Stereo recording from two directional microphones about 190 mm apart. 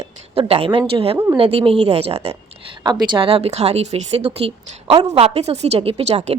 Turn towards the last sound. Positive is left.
turn(degrees=-35)  # may be behind; listen again after turning